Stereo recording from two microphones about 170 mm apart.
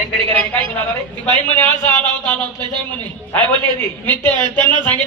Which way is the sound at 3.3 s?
10° left (ahead or behind).